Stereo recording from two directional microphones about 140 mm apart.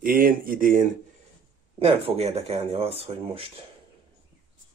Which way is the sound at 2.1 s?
45° right (ahead or behind).